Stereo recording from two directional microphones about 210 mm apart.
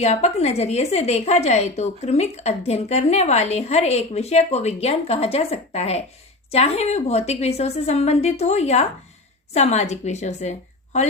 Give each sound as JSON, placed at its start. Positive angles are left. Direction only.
{"t": 0.0, "sound": "a woman's voice", "side_deg": 30}